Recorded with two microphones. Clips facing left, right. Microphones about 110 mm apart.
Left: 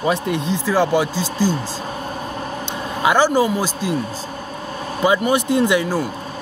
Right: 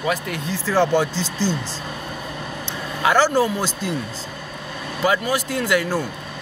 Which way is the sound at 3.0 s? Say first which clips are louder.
Left 2 dB; 15° left (ahead or behind).